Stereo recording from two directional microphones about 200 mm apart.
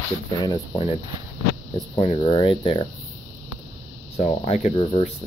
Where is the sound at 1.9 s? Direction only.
25° left (ahead or behind).